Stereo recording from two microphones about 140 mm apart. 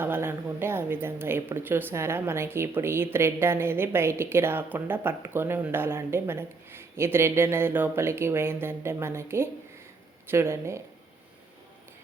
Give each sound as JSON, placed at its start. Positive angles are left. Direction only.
{"t": 0.0, "sound": "speech", "side_deg": -15}